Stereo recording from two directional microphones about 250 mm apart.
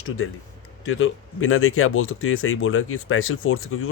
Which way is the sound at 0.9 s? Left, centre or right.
Left.